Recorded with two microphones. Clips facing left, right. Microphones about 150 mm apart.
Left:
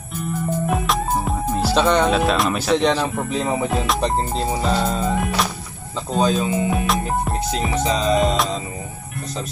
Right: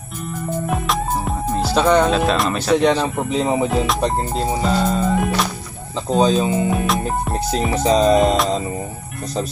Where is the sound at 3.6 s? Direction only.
Centre (ahead or behind).